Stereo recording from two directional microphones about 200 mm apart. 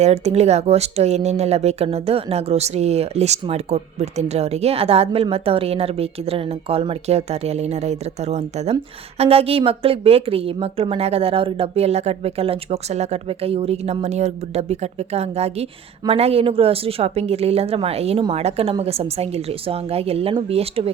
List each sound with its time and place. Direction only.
0.0 s a woman's voice: 35° right (ahead or behind)